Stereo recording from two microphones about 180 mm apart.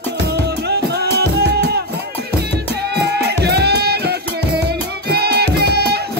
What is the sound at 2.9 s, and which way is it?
Music, 65° right (ahead or behind).